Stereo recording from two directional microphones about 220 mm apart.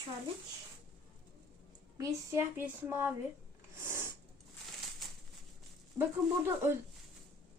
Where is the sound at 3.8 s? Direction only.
10° right (ahead or behind).